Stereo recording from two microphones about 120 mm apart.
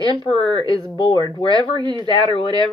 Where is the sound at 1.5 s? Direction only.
35° right (ahead or behind).